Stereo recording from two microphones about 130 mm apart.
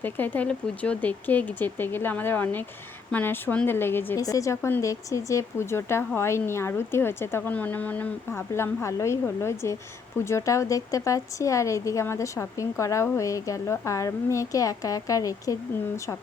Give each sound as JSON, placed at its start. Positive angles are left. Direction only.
{"t": 0.0, "sound": "speech", "side_deg": 15}